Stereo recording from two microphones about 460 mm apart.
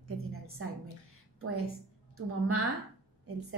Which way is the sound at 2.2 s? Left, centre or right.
Right.